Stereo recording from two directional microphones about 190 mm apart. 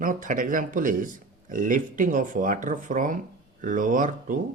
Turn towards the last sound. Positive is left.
turn(degrees=-45)  # may be behind; listen again after turning